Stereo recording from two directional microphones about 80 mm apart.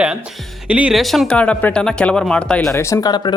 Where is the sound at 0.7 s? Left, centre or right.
Centre.